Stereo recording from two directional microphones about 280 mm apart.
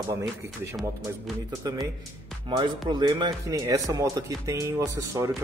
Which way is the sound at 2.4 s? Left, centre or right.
Centre.